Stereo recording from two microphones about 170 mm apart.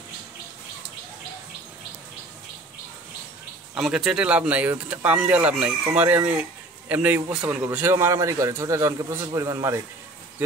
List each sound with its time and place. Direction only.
3.7 s a man's voice: 5° right (ahead or behind)